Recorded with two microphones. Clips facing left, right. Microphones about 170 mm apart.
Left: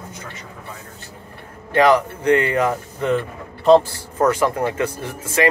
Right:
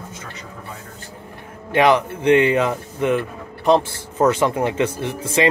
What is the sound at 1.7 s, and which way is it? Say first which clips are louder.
Speech: left 1 dB; 20° right (ahead or behind).